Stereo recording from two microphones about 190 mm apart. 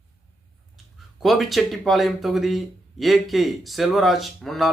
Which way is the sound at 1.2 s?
Centre (ahead or behind).